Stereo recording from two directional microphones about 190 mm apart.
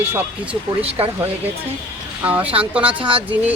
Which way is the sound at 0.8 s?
30° right (ahead or behind).